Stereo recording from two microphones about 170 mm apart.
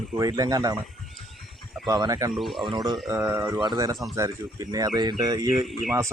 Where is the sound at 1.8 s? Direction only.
25° right (ahead or behind).